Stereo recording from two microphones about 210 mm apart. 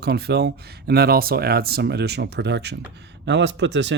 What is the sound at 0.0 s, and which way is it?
Speech, 50° right (ahead or behind).